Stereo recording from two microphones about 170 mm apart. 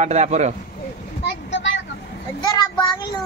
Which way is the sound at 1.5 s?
90° left.